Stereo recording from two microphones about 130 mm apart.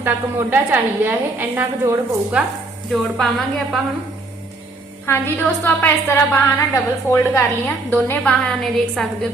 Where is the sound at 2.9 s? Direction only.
Centre (ahead or behind).